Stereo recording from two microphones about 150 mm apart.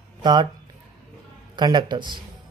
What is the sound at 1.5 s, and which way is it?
Speech, 30° right (ahead or behind).